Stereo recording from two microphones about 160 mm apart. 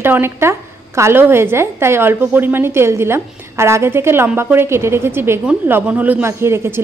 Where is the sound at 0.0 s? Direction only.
15° right (ahead or behind).